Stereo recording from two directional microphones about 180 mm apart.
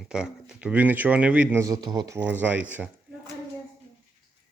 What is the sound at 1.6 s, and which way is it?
Speech, 20° right (ahead or behind).